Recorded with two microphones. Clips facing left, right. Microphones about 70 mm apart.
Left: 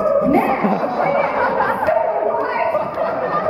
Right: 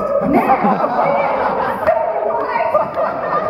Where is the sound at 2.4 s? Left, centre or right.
Right.